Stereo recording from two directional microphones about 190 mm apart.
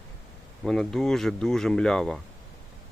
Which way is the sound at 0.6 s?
Centre (ahead or behind).